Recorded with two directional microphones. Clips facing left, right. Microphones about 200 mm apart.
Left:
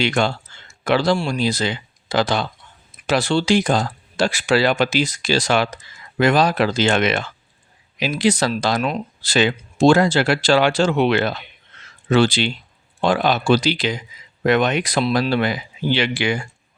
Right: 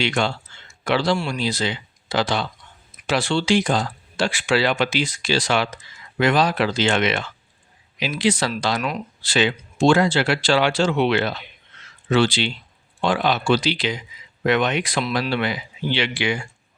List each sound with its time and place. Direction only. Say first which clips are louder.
0.0 s speech: left 3 dB; 45° left (ahead or behind)